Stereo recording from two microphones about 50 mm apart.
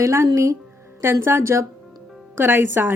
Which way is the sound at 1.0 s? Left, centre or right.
Right.